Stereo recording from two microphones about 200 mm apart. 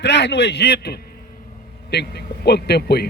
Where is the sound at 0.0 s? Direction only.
60° left (ahead or behind).